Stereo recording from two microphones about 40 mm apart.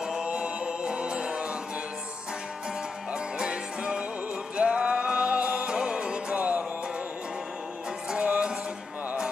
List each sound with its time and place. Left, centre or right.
0.0 s music: centre
3.1 s music: right
5.7 s music: centre
6.3 s music: right
8.1 s music: right